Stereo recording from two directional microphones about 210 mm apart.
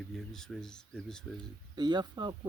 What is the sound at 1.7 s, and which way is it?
Speech, 20° right (ahead or behind).